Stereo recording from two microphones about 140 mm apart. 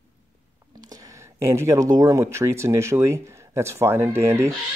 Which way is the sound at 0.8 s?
25° right (ahead or behind).